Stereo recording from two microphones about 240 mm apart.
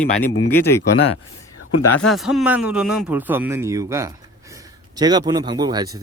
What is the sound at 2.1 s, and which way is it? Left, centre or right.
A man's voice, centre.